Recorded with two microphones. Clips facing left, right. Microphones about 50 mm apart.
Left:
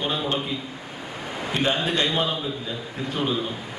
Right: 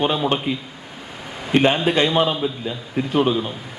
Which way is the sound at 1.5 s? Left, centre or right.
Right.